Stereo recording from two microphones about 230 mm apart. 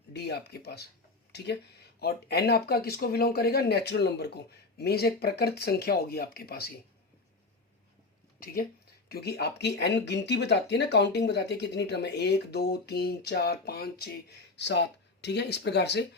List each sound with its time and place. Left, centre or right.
0.1 s speech: left
2.0 s speech: left
9.0 s speech: left